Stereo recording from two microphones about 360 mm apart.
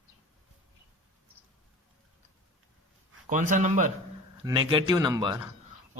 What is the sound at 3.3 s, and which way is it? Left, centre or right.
A man's voice, right.